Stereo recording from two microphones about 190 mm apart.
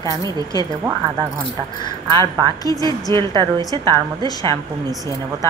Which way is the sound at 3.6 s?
20° left (ahead or behind).